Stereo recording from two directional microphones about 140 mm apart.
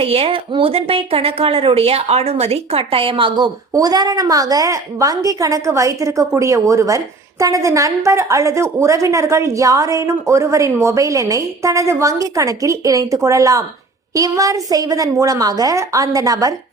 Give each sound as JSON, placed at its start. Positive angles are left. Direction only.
{"t": 0.0, "sound": "a woman's voice", "side_deg": -45}